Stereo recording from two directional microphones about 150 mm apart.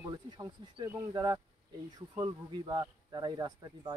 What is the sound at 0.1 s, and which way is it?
Speech, 25° right (ahead or behind).